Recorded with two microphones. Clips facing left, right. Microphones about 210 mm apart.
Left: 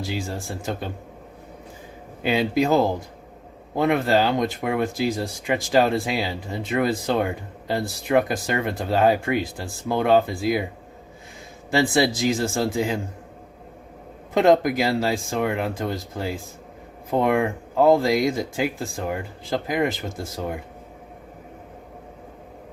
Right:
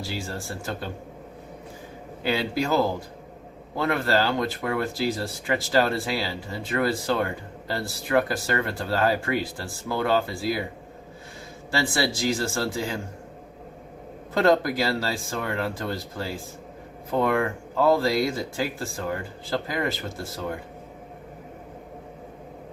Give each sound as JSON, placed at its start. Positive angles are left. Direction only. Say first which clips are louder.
{"t": 0.0, "sound": "speech", "louder": "left 3 dB", "side_deg": 15}
{"t": 2.2, "sound": "speech", "louder": "left 5 dB", "side_deg": 20}
{"t": 11.7, "sound": "speech", "louder": "left 6 dB", "side_deg": 20}
{"t": 14.3, "sound": "speech", "louder": "left 3 dB", "side_deg": 15}